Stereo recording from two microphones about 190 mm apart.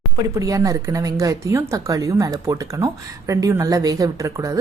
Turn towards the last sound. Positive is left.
turn(degrees=-15)  # may be behind; listen again after turning